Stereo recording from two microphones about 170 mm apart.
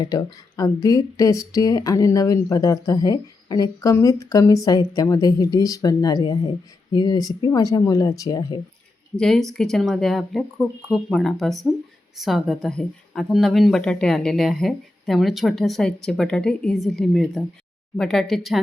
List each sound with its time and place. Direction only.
0.0 s speech: 20° left (ahead or behind)
9.1 s a woman's voice: 5° left (ahead or behind)